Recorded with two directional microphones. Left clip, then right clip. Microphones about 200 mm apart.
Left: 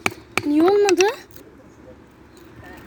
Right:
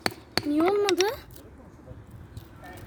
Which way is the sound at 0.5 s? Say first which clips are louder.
Left 8 dB; 5° left (ahead or behind).